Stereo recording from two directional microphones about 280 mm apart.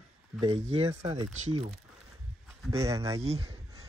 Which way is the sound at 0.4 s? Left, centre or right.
Right.